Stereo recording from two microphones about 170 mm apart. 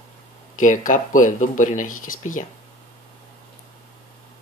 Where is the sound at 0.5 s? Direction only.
50° left (ahead or behind).